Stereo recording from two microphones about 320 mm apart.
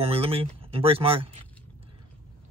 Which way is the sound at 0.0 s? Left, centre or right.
Centre.